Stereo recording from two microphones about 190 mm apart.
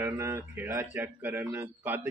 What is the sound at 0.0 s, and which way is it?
Speech, 15° right (ahead or behind).